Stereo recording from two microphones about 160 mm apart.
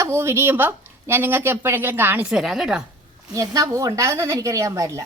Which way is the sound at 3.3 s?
20° right (ahead or behind).